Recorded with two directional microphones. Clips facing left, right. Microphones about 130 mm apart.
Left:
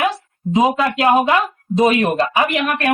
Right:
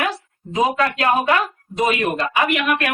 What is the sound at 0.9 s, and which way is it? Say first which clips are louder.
A woman's voice: left 3 dB; 25° left (ahead or behind).